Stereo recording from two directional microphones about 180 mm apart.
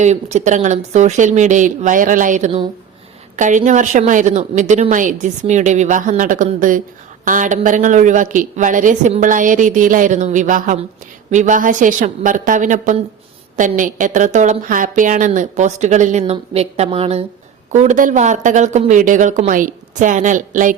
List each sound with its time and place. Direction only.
0.0 s a woman's voice: 40° right (ahead or behind)